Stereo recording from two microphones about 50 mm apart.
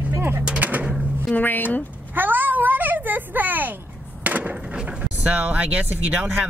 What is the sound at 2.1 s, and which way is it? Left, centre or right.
A child's voice, right.